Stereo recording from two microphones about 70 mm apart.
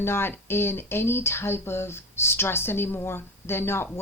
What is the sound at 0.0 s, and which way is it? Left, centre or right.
Speech, left.